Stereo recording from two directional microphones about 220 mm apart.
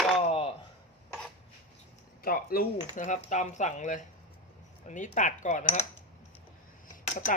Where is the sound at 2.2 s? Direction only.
45° left (ahead or behind).